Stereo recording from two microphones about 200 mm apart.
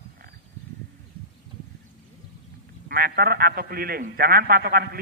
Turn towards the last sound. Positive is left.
turn(degrees=-50)  # may be behind; listen again after turning